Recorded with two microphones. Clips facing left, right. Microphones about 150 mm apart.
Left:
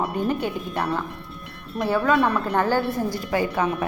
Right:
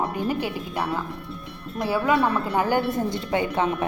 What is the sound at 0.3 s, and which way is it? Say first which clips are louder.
A woman's voice: left 1 dB; 5° right (ahead or behind).